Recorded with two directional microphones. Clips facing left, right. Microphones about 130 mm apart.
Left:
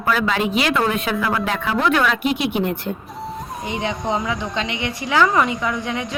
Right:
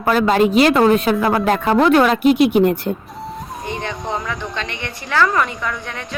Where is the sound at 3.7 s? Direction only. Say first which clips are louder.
Left 2 dB; 15° left (ahead or behind).